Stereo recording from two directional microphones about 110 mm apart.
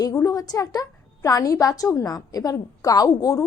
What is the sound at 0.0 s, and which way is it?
A woman's voice, 30° left (ahead or behind).